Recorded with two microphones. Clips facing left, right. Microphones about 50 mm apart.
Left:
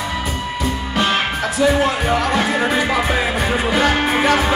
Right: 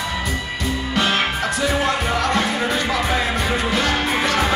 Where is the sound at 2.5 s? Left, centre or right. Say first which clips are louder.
Left 4 dB; left.